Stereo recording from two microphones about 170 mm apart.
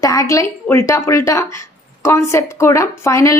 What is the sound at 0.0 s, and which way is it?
A woman's voice, 20° left (ahead or behind).